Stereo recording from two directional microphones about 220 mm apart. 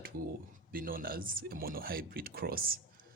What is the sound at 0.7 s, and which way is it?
Speech, 40° right (ahead or behind).